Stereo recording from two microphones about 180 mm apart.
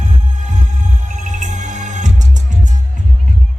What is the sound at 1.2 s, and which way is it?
Music, 40° right (ahead or behind).